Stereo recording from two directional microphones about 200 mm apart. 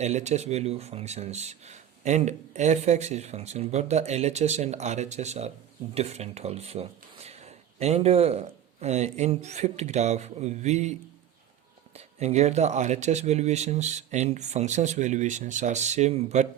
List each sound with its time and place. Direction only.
0.0 s speech: 35° right (ahead or behind)
11.9 s speech: 35° right (ahead or behind)